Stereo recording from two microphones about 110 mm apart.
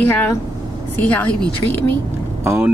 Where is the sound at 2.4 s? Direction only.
15° right (ahead or behind).